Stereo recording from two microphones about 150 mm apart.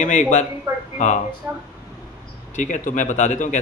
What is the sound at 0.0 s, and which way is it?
Speech, 55° left (ahead or behind).